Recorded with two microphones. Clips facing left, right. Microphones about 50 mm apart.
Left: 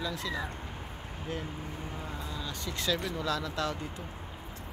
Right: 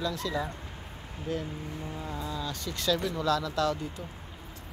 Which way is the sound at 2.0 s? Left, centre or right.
Centre.